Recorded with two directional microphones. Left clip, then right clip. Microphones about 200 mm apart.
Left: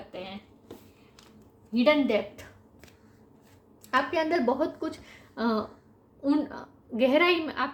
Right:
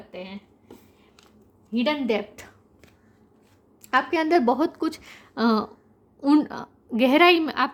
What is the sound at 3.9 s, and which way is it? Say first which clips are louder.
A woman's voice: right 5 dB; 55° right (ahead or behind).